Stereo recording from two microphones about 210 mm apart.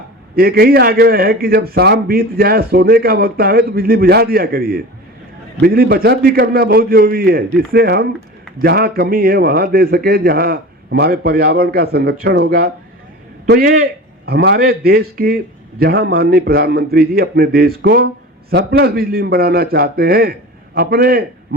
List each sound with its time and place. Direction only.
0.3 s a man's voice: 45° right (ahead or behind)